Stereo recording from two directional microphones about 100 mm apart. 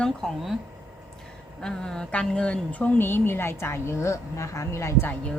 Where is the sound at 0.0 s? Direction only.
5° left (ahead or behind).